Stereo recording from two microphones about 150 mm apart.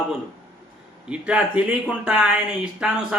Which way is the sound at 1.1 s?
10° right (ahead or behind).